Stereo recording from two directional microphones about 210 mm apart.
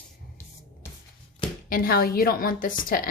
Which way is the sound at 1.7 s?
45° left (ahead or behind).